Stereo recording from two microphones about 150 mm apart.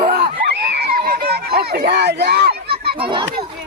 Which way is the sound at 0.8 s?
90° right.